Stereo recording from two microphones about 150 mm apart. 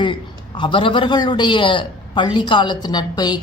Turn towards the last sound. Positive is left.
turn(degrees=30)  # may be behind; listen again after turning